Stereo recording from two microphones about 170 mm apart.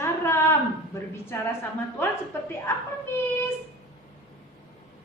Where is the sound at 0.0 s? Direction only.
15° left (ahead or behind).